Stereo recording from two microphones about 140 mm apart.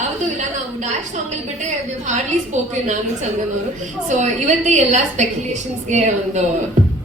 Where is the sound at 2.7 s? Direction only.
60° right (ahead or behind).